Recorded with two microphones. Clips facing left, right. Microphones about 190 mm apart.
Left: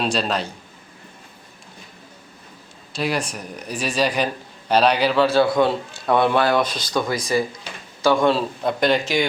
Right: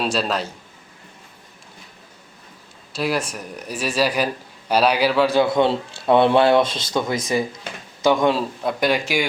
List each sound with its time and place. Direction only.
0.0 s speech: 5° right (ahead or behind)
2.9 s a man's voice: 5° right (ahead or behind)